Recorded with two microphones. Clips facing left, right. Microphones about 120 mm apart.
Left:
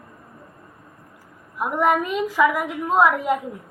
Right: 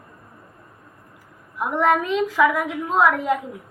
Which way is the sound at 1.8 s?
10° left (ahead or behind).